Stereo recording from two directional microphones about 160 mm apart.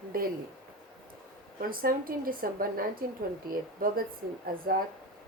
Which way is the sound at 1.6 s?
65° right (ahead or behind).